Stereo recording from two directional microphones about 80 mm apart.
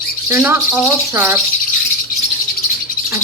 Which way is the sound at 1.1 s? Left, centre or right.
Right.